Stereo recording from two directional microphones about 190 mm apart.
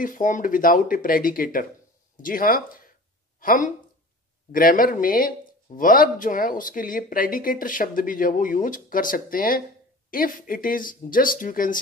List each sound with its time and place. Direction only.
0.0 s a woman's voice: 45° left (ahead or behind)